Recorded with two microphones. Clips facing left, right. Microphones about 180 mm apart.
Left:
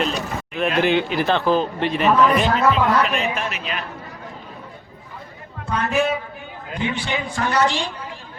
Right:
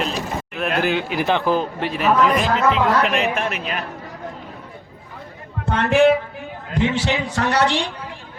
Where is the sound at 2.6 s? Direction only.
80° right; by 3.8 s 45° right (ahead or behind).